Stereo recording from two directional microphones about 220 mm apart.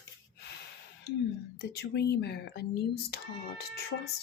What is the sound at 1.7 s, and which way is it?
Speech, 50° left (ahead or behind).